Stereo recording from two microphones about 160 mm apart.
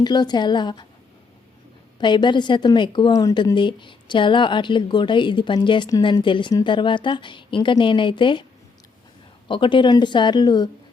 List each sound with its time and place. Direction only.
0.0 s a woman's voice: 25° left (ahead or behind)
2.0 s a woman's voice: 30° left (ahead or behind)
9.5 s a woman's voice: 30° left (ahead or behind)